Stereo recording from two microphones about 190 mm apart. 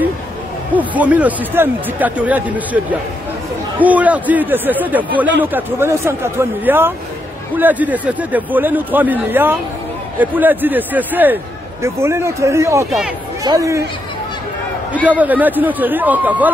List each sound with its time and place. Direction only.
0.7 s speech: 10° right (ahead or behind)
15.0 s speech: 10° right (ahead or behind)